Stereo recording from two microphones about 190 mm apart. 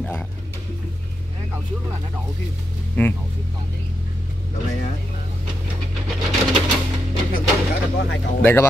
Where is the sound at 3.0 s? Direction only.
10° left (ahead or behind).